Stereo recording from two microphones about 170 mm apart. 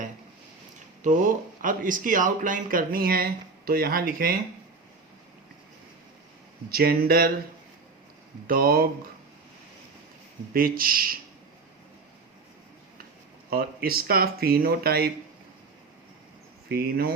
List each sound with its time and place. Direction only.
1.0 s speech: 45° right (ahead or behind)
6.7 s speech: 65° right (ahead or behind)
8.4 s speech: 60° right (ahead or behind)
10.5 s speech: 60° right (ahead or behind)
13.5 s speech: 60° right (ahead or behind)
16.6 s speech: 60° right (ahead or behind)